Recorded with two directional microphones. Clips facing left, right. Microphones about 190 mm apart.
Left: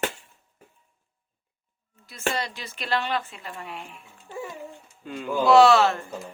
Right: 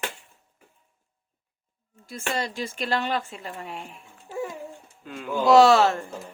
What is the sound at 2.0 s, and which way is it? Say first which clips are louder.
Speech: even; 45° right (ahead or behind).